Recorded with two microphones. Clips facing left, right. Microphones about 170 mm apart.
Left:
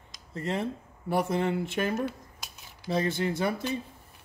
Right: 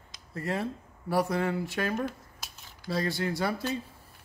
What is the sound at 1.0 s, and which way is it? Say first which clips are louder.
Speech: left 1 dB; 20° left (ahead or behind).